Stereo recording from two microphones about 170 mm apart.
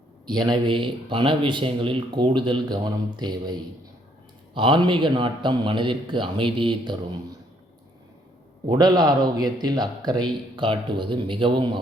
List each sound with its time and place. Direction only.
0.3 s a man's voice: 25° right (ahead or behind)
8.6 s a man's voice: 25° right (ahead or behind)